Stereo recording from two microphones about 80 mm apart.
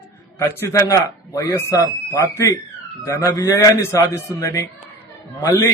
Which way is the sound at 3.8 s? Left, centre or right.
Left.